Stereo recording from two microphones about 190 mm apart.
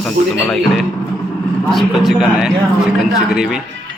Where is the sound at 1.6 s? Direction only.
Centre (ahead or behind).